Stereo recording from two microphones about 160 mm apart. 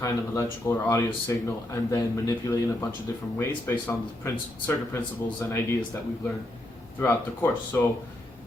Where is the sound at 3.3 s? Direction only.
15° left (ahead or behind).